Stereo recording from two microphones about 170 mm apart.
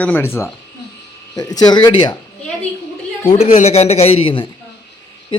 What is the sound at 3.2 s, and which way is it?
A man's voice, 40° left (ahead or behind).